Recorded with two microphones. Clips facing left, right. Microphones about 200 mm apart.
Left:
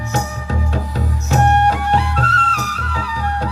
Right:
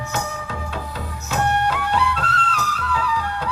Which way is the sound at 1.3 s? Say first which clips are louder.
Left 6 dB; 45° left (ahead or behind).